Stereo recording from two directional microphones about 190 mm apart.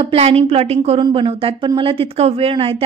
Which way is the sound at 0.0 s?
30° right (ahead or behind).